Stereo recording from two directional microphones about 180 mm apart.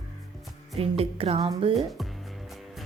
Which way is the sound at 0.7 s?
30° right (ahead or behind).